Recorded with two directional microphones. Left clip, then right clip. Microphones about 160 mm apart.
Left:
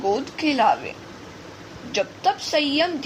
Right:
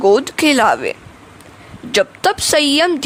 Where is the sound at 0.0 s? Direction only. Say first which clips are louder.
Right 11 dB; 70° right (ahead or behind).